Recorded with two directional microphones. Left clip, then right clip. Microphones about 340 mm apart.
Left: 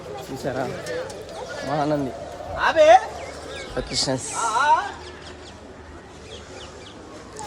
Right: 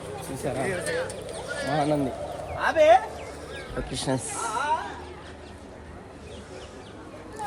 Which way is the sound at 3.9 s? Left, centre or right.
Centre.